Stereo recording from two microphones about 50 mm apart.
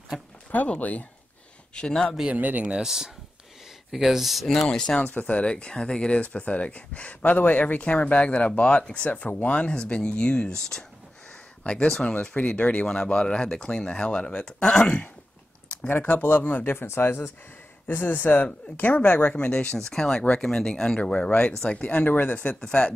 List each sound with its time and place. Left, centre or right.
0.1 s speech: centre
0.7 s speech: left
1.8 s speech: centre
2.3 s speech: right
2.6 s speech: centre
3.9 s speech: centre
4.6 s speech: centre
12.8 s speech: centre
16.0 s speech: left
16.8 s speech: left
19.3 s speech: left
21.9 s speech: left
22.7 s speech: centre